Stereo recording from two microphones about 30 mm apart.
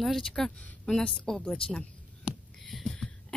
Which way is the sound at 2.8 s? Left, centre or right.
Left.